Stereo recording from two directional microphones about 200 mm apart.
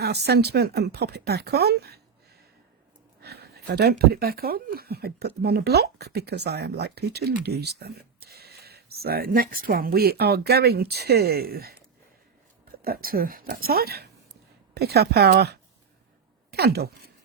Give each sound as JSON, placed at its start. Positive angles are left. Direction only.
{"t": 0.0, "sound": "speech", "side_deg": -55}
{"t": 3.2, "sound": "speech", "side_deg": -55}
{"t": 12.8, "sound": "speech", "side_deg": -50}